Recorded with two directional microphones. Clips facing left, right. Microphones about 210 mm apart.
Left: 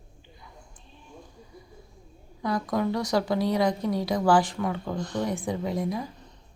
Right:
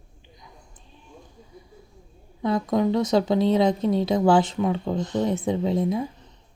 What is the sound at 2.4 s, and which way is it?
A woman's voice, 25° right (ahead or behind).